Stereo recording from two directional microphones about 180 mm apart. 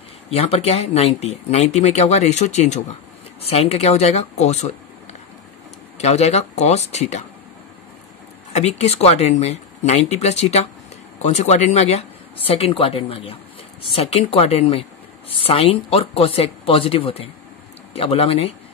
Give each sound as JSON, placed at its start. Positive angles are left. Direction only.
{"t": 0.3, "sound": "speech", "side_deg": 35}
{"t": 5.9, "sound": "speech", "side_deg": 35}
{"t": 8.5, "sound": "speech", "side_deg": 35}